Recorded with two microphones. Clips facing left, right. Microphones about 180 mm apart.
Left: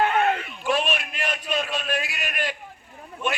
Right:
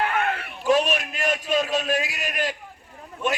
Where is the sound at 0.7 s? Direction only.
40° right (ahead or behind).